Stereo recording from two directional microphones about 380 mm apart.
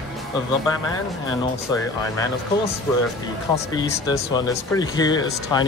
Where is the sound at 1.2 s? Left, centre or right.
Centre.